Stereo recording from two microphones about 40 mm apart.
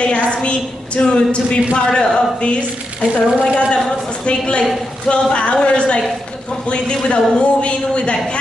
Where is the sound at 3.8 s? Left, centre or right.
Left.